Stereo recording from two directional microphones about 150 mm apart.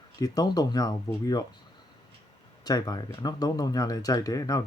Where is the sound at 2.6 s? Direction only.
25° left (ahead or behind).